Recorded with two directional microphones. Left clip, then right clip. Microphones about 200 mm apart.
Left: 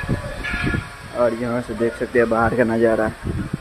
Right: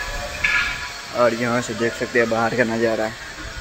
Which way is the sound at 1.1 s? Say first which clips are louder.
Right 1 dB; centre (ahead or behind).